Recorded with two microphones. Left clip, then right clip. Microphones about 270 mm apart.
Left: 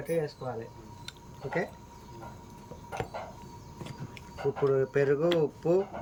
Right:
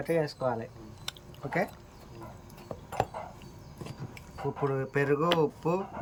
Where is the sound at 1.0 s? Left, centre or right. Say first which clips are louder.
Right 2 dB; centre.